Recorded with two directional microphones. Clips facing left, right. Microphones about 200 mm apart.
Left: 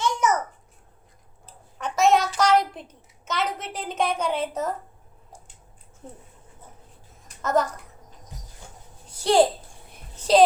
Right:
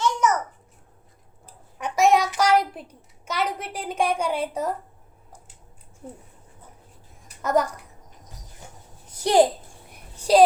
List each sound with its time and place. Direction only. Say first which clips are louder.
0.0 s babbling: right 1 dB; 10° left (ahead or behind)
1.8 s child singing: right 1 dB; 15° right (ahead or behind)
3.2 s a child's voice: right 1 dB; 10° right (ahead or behind)
6.0 s a child's voice: right 3 dB; 5° right (ahead or behind)
7.3 s babbling: right 1 dB; 10° right (ahead or behind)
9.2 s a child's voice: right 1 dB; 20° right (ahead or behind)
10.2 s a sound: right 1 dB; 10° right (ahead or behind)